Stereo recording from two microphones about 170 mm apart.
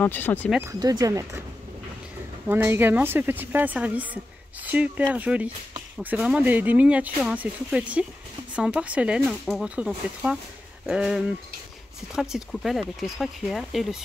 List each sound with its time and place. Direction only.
0.0 s speech: 10° left (ahead or behind)
0.5 s speech: 10° right (ahead or behind)
2.4 s speech: 15° right (ahead or behind)